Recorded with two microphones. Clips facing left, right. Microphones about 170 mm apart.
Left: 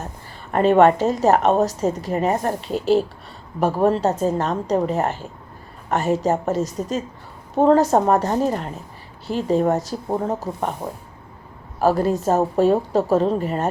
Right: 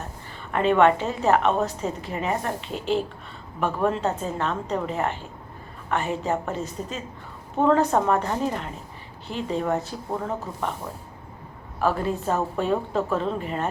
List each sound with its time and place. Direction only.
0.5 s a woman's voice: 40° left (ahead or behind)